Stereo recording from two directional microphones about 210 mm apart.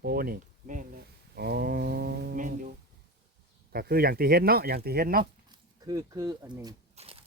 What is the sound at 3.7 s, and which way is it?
Speech, 45° right (ahead or behind).